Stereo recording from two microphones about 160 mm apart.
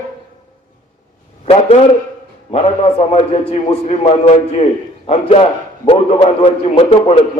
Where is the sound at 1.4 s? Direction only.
40° left (ahead or behind).